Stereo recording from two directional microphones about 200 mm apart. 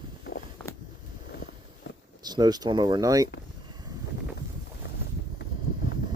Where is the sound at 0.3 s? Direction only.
60° left (ahead or behind).